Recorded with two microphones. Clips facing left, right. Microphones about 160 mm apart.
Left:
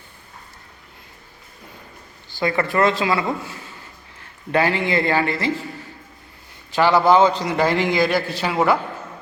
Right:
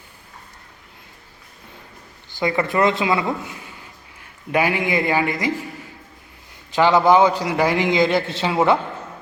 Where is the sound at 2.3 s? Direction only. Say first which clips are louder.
Even; 20° right (ahead or behind).